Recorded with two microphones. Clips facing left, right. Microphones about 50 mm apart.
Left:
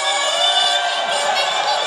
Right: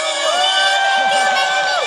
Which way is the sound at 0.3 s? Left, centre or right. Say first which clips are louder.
Right 6 dB; right.